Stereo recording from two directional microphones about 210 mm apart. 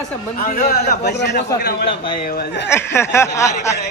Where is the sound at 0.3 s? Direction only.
45° left (ahead or behind).